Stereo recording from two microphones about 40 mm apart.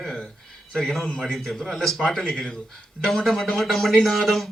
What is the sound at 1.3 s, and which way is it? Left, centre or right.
Speech, centre.